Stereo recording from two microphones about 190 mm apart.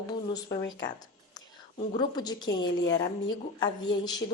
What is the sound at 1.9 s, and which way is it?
A woman's voice, 20° left (ahead or behind).